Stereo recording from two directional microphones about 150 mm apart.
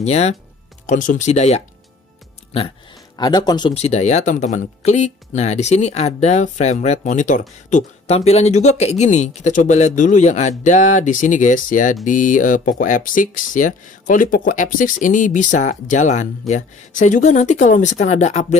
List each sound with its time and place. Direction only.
0.0 s speech: 45° left (ahead or behind)
2.5 s speech: 35° left (ahead or behind)
3.7 s speech: 45° left (ahead or behind)